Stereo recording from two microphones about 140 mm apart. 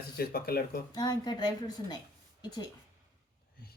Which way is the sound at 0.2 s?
90° left.